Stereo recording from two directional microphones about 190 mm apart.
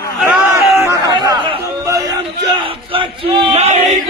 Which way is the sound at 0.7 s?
15° right (ahead or behind).